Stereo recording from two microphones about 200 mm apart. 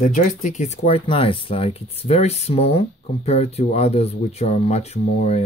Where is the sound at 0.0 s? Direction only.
40° left (ahead or behind).